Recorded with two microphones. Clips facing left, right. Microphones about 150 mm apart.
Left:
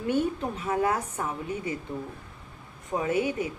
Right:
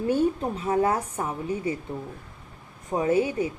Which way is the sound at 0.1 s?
30° right (ahead or behind).